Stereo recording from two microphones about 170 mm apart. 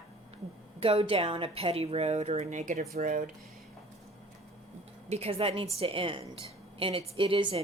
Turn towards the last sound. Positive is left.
turn(degrees=-30)  # may be behind; listen again after turning